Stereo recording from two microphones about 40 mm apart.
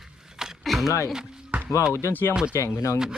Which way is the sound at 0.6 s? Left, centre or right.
Centre.